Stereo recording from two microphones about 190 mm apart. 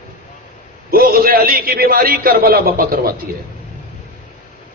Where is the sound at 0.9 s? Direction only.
50° right (ahead or behind).